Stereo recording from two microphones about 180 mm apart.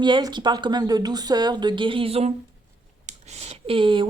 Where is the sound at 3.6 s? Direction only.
30° right (ahead or behind).